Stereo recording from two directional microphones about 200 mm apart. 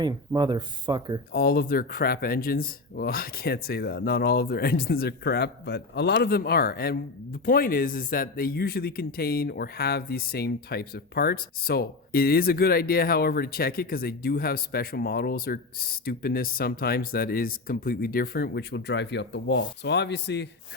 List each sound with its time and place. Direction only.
0.0 s speech: 20° right (ahead or behind)
1.3 s speech: 50° left (ahead or behind)